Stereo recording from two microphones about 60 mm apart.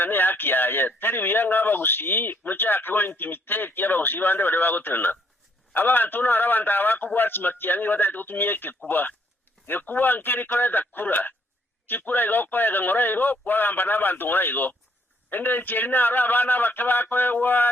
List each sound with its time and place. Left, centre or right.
0.0 s speech: left